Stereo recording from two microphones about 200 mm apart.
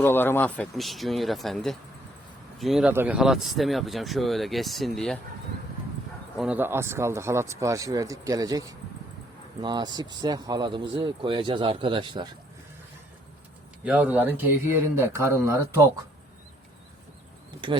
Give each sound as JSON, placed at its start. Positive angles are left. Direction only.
{"t": 0.0, "sound": "speech", "side_deg": 10}
{"t": 6.3, "sound": "speech", "side_deg": -5}
{"t": 13.8, "sound": "speech", "side_deg": -5}